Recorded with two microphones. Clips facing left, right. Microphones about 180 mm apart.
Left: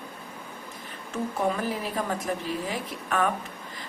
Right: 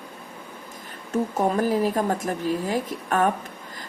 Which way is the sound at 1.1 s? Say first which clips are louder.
Right 5 dB; 40° right (ahead or behind).